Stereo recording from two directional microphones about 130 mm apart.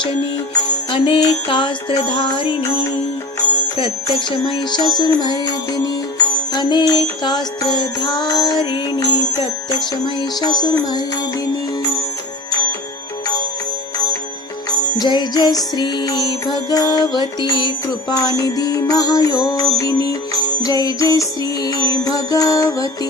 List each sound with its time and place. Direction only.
0.9 s music: 40° left (ahead or behind)
3.8 s music: 40° left (ahead or behind)
14.9 s music: 30° left (ahead or behind)